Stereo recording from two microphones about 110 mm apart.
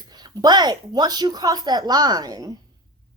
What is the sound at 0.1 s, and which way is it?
A woman's voice, 40° right (ahead or behind).